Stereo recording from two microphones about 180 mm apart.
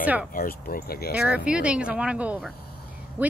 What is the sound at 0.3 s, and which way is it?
Speech, 55° left (ahead or behind).